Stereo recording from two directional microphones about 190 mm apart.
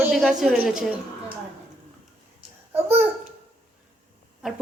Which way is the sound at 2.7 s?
10° right (ahead or behind).